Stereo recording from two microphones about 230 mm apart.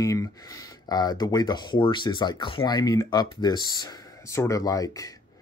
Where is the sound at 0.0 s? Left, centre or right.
Centre.